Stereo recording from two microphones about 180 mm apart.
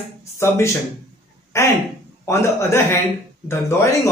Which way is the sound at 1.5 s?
15° left (ahead or behind).